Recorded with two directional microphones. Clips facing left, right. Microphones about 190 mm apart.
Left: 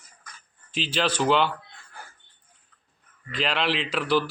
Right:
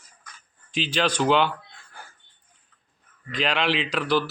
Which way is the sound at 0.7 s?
5° left (ahead or behind).